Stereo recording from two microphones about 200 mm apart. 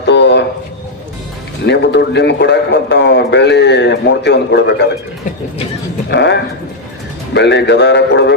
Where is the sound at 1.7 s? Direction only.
60° left (ahead or behind).